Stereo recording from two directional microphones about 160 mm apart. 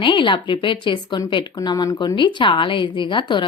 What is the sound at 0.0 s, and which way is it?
A woman's voice, 30° left (ahead or behind).